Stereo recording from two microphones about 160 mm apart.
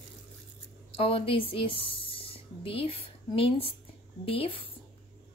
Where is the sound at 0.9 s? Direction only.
35° left (ahead or behind).